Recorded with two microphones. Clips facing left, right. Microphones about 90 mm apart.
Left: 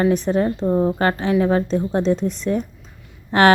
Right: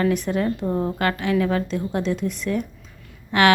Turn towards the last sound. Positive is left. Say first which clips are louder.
# left 3 dB
turn(degrees=35)  # may be behind; listen again after turning